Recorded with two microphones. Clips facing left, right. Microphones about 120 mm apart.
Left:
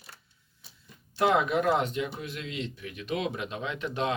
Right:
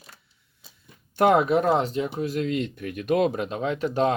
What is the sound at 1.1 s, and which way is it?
Speech, 50° right (ahead or behind).